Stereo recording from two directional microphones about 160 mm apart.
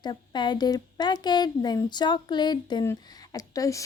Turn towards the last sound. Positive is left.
turn(degrees=20)  # may be behind; listen again after turning